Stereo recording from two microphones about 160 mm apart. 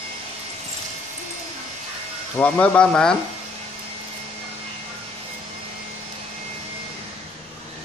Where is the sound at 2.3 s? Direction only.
10° left (ahead or behind).